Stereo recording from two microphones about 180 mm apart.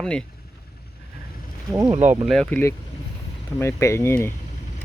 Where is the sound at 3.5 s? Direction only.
15° left (ahead or behind).